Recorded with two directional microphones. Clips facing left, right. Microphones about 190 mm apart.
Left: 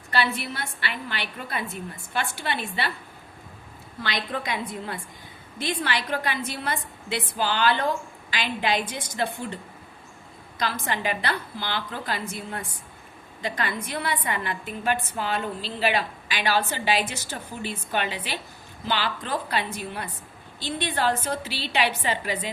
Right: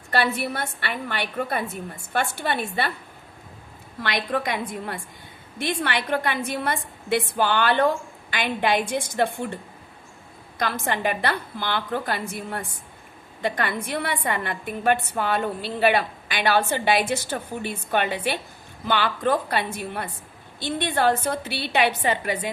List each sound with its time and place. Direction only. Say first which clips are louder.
0.1 s a woman's voice: right 3 dB; 50° right (ahead or behind)
4.0 s a woman's voice: right 4 dB; 55° right (ahead or behind)
10.6 s a woman's voice: right 3 dB; 55° right (ahead or behind)